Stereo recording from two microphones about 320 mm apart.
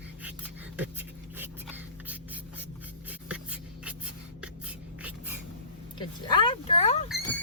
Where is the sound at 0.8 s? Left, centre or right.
Centre.